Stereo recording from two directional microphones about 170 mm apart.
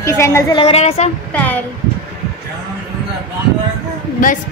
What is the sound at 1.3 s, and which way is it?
Speech, 10° left (ahead or behind).